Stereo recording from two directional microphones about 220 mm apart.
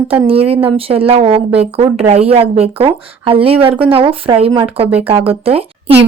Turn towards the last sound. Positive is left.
turn(degrees=-25)  # may be behind; listen again after turning